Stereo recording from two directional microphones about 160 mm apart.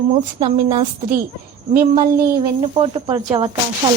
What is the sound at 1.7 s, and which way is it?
Speech, 20° right (ahead or behind).